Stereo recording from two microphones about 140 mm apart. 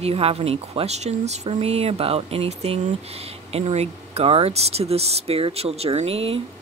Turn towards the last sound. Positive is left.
turn(degrees=-45)  # may be behind; listen again after turning